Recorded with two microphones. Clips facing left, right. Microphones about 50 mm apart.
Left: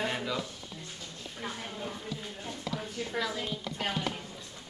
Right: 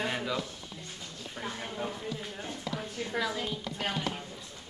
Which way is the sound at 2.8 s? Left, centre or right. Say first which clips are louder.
Right 1 dB; centre.